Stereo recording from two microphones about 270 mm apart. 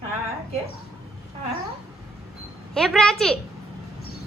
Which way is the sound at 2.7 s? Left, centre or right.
Centre.